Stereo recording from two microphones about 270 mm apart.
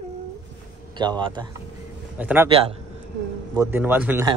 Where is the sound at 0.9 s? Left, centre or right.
Centre.